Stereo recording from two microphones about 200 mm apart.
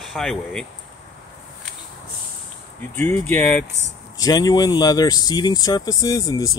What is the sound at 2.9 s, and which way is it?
Speech, 10° left (ahead or behind).